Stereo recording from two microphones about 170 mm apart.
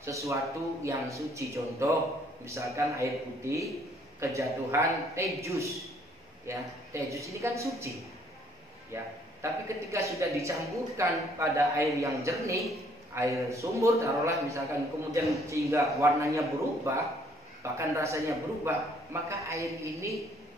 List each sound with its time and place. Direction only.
0.0 s a man's voice: 20° right (ahead or behind)
8.9 s a man's voice: 15° right (ahead or behind)